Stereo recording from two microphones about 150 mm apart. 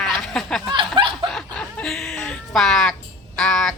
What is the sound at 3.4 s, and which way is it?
Speech, 5° left (ahead or behind).